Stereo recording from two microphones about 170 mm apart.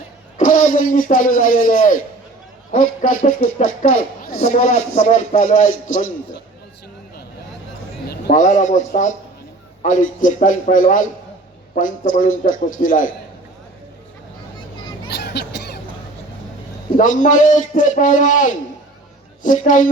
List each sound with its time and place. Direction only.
0.3 s speech: 50° left (ahead or behind)
8.3 s speech: 45° left (ahead or behind)
15.1 s a sound: 75° left (ahead or behind)
17.0 s speech: 50° left (ahead or behind)